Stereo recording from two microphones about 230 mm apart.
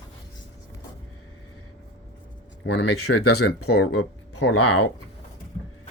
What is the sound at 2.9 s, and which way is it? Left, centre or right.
Speech, left.